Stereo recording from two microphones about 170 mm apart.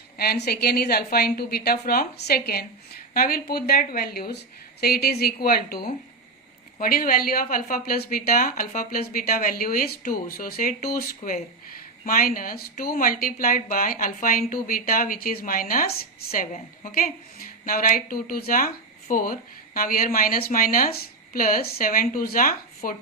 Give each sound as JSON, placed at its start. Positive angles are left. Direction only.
{"t": 0.2, "sound": "speech", "side_deg": 70}